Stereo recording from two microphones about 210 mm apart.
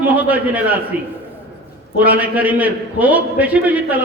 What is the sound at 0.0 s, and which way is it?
Speech, 10° right (ahead or behind).